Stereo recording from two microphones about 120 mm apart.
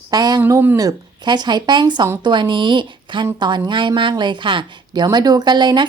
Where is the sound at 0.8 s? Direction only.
35° right (ahead or behind).